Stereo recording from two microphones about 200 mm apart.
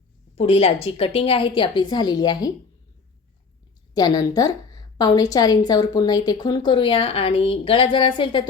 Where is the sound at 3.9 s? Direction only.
20° left (ahead or behind).